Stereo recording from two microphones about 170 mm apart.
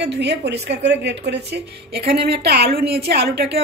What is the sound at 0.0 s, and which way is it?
A woman's voice, 85° right.